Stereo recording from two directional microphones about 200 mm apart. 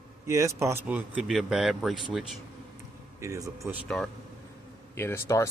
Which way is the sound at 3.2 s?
15° right (ahead or behind).